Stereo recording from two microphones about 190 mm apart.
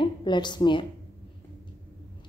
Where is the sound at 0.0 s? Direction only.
25° left (ahead or behind).